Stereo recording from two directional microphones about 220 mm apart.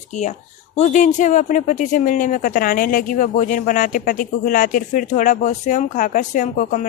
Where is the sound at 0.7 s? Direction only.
35° left (ahead or behind).